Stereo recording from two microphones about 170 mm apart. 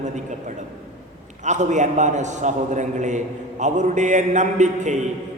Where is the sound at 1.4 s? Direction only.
45° right (ahead or behind).